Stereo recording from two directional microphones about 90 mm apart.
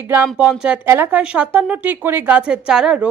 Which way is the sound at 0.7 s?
25° right (ahead or behind).